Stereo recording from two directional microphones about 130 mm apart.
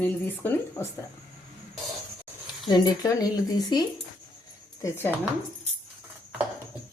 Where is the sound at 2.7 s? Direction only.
30° left (ahead or behind).